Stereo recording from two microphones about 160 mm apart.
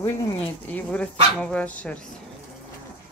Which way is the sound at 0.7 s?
10° left (ahead or behind).